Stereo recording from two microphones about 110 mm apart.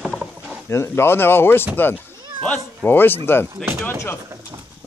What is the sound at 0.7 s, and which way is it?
Speech, 25° left (ahead or behind).